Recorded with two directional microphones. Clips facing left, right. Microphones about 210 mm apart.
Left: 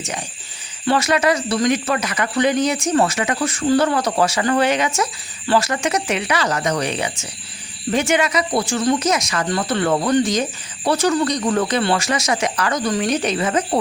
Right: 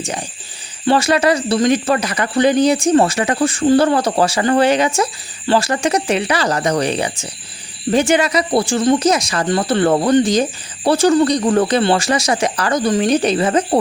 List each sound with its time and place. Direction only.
0.0 s speech: 35° right (ahead or behind)